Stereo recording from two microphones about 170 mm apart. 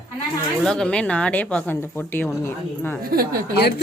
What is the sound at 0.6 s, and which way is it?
Speech, 5° left (ahead or behind).